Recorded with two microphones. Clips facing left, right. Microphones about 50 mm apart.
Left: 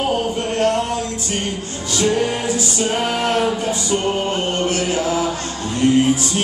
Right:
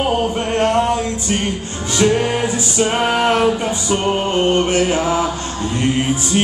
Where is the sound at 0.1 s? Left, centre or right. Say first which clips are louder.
Right 2 dB; right.